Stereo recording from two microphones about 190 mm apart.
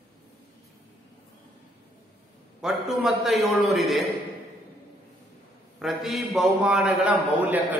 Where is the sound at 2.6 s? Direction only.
Centre (ahead or behind).